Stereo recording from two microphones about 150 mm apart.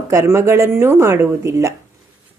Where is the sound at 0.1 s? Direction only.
20° right (ahead or behind).